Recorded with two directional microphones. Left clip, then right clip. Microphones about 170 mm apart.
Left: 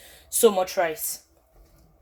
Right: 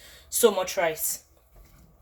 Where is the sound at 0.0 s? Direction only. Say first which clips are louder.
Left 2 dB; 40° left (ahead or behind).